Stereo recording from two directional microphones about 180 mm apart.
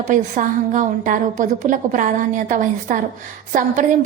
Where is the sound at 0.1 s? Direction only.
45° right (ahead or behind).